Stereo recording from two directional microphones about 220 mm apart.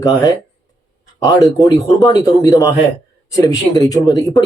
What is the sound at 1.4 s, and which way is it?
Speech, 15° left (ahead or behind).